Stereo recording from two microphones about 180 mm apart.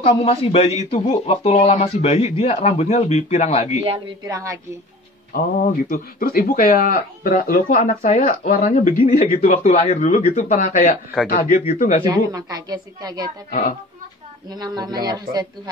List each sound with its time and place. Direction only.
0.0 s speech: 35° left (ahead or behind)
4.2 s a woman's voice: 15° right (ahead or behind)
5.3 s speech: 50° left (ahead or behind)
12.0 s a woman's voice: 20° right (ahead or behind)
13.5 s speech: 50° left (ahead or behind)
14.5 s a woman's voice: 25° right (ahead or behind)